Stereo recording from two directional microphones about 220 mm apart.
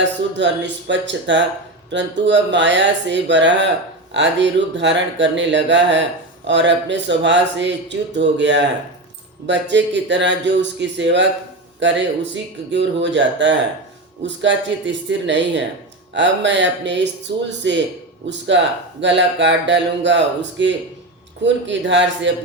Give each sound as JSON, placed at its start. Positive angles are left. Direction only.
{"t": 0.0, "sound": "speech", "side_deg": -55}